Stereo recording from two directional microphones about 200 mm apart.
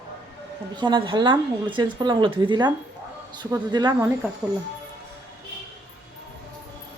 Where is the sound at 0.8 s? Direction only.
25° right (ahead or behind).